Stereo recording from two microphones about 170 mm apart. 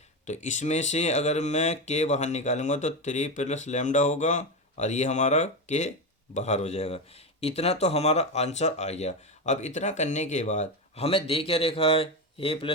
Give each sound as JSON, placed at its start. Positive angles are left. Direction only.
{"t": 0.3, "sound": "speech", "side_deg": 45}